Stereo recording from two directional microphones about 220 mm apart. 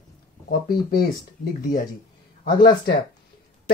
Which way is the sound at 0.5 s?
40° left (ahead or behind).